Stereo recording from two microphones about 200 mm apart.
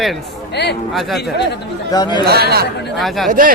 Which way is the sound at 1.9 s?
20° left (ahead or behind).